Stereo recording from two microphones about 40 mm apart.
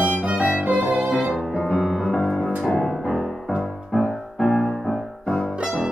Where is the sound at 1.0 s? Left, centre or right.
Right.